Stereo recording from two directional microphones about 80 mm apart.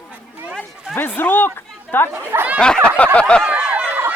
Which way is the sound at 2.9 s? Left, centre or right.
Centre.